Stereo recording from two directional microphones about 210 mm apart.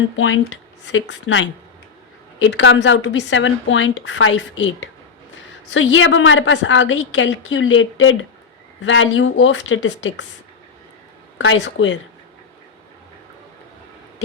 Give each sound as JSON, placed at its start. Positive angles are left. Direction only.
{"t": 0.2, "sound": "a woman's voice", "side_deg": 65}
{"t": 11.3, "sound": "a woman's voice", "side_deg": 60}